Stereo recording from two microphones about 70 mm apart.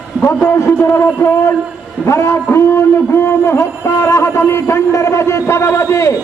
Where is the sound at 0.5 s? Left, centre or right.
Left.